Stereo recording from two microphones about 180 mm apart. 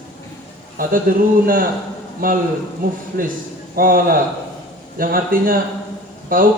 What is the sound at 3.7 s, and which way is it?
A man's voice, 50° right (ahead or behind).